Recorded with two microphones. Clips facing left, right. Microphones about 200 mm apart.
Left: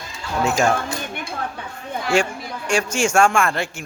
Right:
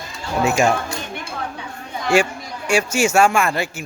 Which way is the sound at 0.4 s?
10° right (ahead or behind).